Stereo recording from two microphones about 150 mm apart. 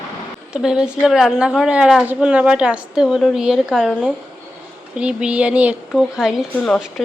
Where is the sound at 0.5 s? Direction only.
5° right (ahead or behind).